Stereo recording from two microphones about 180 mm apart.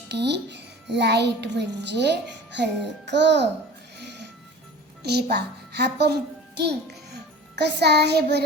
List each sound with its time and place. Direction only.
0.1 s a child's voice: 70° right (ahead or behind)
3.9 s music: 70° right (ahead or behind)
5.0 s a child's voice: 65° right (ahead or behind)
7.5 s a child's voice: 70° right (ahead or behind)